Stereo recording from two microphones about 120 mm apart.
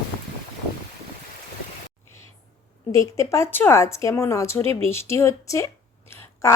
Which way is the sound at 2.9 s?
25° left (ahead or behind).